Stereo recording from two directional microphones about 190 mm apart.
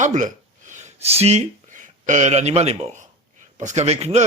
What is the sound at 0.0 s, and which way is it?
Speech, 40° right (ahead or behind).